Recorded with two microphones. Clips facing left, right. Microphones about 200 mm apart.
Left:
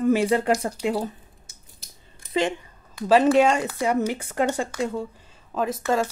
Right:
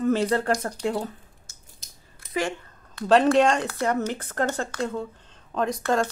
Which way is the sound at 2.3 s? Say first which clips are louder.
Left 4 dB; 20° left (ahead or behind).